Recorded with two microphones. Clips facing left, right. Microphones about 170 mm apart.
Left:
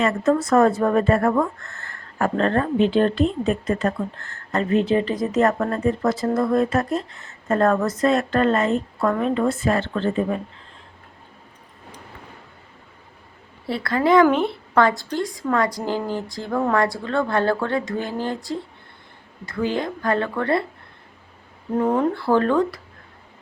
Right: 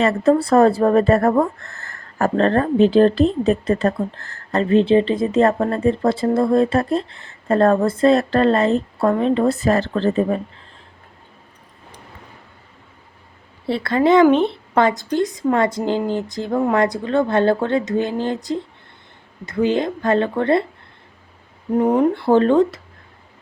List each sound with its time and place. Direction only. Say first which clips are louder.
0.0 s speech: right 4 dB; 30° right (ahead or behind)
13.7 s speech: right 3 dB; 25° right (ahead or behind)
21.8 s speech: right 4 dB; 15° right (ahead or behind)